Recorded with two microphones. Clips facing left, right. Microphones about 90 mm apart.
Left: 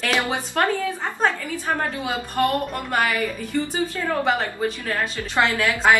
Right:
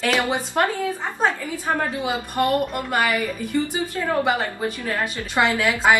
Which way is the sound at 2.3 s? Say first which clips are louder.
Right 1 dB; 15° right (ahead or behind).